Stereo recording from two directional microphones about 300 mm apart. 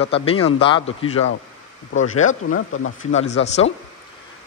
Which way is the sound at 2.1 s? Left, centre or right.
Left.